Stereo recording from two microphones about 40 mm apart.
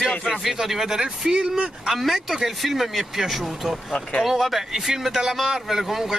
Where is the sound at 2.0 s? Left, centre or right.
Centre.